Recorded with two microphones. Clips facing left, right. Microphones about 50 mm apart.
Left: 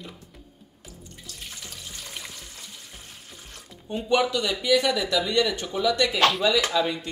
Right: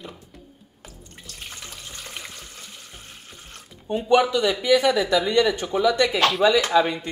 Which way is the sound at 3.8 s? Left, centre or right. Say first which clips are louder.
Right 4 dB; centre.